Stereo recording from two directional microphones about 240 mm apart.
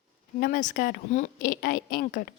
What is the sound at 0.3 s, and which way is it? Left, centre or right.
A woman's voice, left.